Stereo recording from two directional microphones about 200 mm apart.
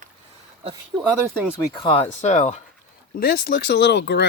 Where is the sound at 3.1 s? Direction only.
50° left (ahead or behind).